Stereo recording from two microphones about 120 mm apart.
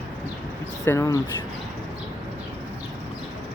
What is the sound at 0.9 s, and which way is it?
Speech, 25° left (ahead or behind).